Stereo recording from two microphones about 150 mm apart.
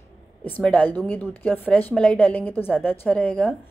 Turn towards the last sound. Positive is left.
turn(degrees=10)  # may be behind; listen again after turning